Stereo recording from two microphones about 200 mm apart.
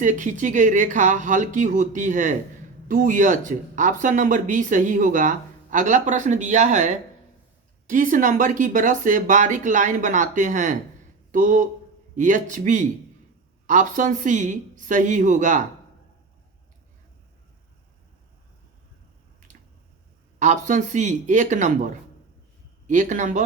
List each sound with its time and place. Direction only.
0.0 s speech: 40° right (ahead or behind)
20.4 s speech: 35° right (ahead or behind)
22.9 s speech: 35° right (ahead or behind)